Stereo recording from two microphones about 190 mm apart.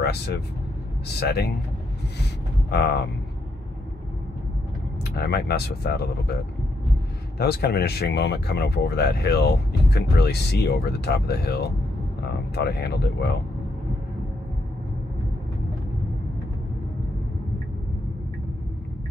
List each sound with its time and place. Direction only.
0.0 s speech: 60° left (ahead or behind)
2.7 s speech: 60° left (ahead or behind)
5.1 s speech: 60° left (ahead or behind)
7.3 s speech: 55° left (ahead or behind)